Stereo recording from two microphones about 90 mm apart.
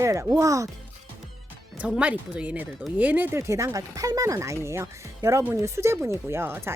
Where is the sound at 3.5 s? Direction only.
35° right (ahead or behind).